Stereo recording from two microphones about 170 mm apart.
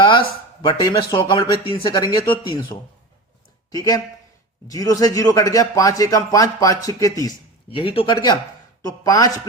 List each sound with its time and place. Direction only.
0.0 s speech: 30° left (ahead or behind)
7.7 s speech: 30° left (ahead or behind)